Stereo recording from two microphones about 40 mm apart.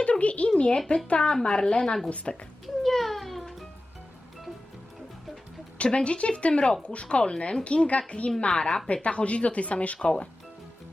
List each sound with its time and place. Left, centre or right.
0.0 s speech: left
1.2 s speech: centre
2.0 s speech: left
2.8 s a sound: centre
5.7 s speech: left